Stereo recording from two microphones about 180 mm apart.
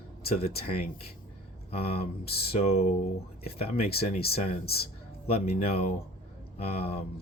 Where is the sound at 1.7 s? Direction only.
35° left (ahead or behind).